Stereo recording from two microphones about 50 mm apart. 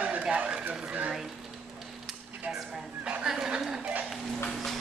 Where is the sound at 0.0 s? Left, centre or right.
Right.